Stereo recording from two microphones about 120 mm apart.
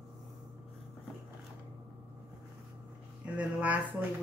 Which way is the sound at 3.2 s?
10° right (ahead or behind).